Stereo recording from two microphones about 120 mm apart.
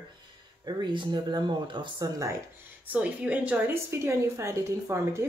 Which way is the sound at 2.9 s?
10° right (ahead or behind).